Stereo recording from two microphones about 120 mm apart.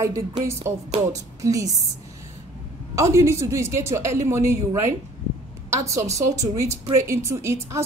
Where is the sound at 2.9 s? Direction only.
25° right (ahead or behind).